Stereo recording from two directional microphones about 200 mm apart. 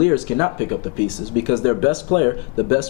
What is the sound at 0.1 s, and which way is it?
Speech, 20° left (ahead or behind).